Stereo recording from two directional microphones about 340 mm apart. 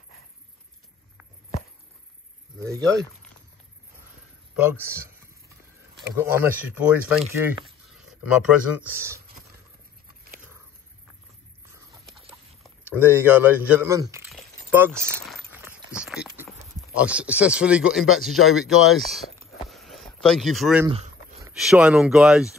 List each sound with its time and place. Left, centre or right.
2.6 s speech: centre
4.6 s speech: centre
12.6 s speech: centre
19.7 s a sound: centre
20.9 s a sound: centre
21.5 s speech: centre